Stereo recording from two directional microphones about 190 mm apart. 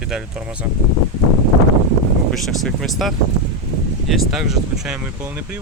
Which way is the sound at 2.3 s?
Centre (ahead or behind).